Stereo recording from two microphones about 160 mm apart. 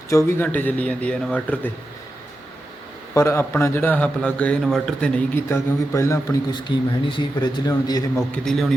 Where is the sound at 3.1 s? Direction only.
15° left (ahead or behind).